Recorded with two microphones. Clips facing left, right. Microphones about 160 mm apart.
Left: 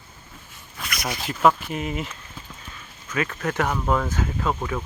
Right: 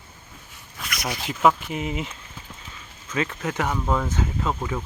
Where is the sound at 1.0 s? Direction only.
10° right (ahead or behind).